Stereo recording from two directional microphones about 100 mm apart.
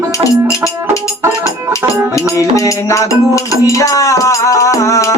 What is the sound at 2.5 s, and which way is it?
Music, 30° left (ahead or behind).